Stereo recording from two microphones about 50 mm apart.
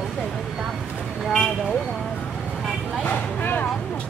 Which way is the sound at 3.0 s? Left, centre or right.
Left.